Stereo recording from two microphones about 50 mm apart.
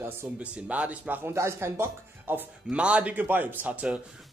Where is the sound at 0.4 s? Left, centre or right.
Right.